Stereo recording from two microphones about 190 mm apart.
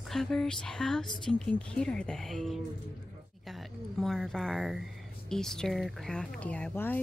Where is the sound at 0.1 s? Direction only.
Centre (ahead or behind).